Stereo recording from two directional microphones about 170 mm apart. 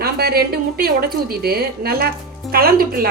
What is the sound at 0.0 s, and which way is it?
A woman's voice, 65° right (ahead or behind).